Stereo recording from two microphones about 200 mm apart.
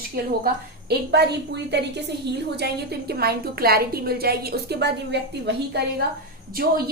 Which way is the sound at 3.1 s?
50° right (ahead or behind).